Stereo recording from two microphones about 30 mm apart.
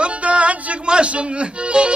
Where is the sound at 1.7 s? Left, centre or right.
Right.